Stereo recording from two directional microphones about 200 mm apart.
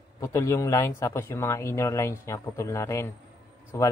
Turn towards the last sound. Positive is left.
turn(degrees=15)  # may be behind; listen again after turning